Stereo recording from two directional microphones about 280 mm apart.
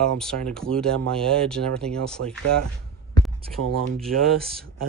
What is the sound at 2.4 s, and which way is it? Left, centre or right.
Speech, right.